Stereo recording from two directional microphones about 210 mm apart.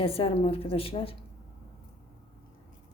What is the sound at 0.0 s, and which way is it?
A woman's voice, 25° left (ahead or behind).